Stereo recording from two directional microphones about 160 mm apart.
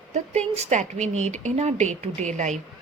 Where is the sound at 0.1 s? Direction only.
45° right (ahead or behind).